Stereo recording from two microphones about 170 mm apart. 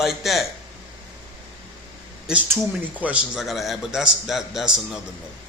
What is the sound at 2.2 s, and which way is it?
A man's voice, 10° right (ahead or behind).